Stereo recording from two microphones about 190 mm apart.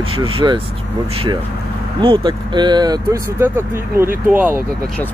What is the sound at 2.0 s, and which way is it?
Speech, 25° right (ahead or behind).